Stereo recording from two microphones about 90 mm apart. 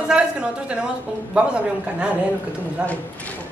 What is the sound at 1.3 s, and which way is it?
Speech, 10° right (ahead or behind).